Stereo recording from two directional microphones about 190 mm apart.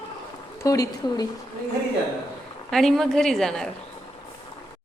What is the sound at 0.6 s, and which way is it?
Speech, 20° left (ahead or behind).